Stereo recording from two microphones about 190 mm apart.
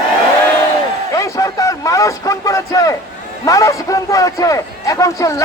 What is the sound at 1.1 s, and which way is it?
A man's voice, 15° left (ahead or behind).